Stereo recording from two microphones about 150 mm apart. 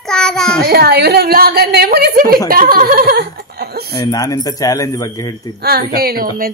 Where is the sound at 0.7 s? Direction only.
90° right.